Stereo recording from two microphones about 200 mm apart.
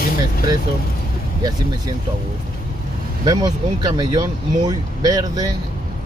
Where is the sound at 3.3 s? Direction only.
20° right (ahead or behind).